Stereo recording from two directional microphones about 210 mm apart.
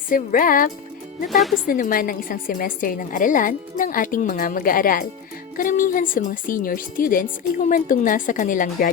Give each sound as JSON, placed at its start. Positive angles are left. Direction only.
{"t": 0.1, "sound": "a woman's voice", "side_deg": 40}